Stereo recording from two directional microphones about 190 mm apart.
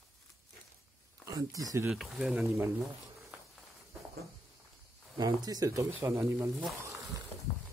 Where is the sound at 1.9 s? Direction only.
Centre (ahead or behind).